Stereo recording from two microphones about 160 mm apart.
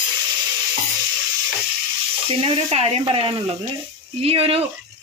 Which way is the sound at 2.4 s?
35° right (ahead or behind).